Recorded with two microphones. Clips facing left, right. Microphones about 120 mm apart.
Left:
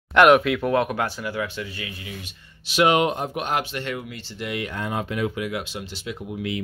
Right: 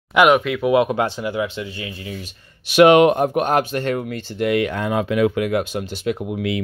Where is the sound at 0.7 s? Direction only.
20° right (ahead or behind).